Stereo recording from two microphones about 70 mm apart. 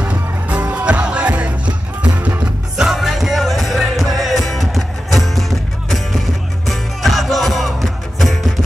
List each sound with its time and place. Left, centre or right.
0.0 s music: right
2.8 s music: centre